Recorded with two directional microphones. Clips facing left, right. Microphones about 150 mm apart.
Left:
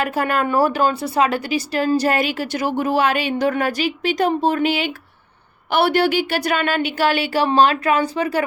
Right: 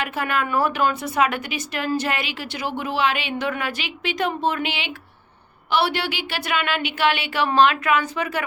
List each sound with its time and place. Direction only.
0.0 s speech: 40° left (ahead or behind)